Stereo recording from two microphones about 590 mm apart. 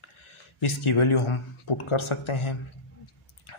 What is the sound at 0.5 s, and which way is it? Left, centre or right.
Speech, left.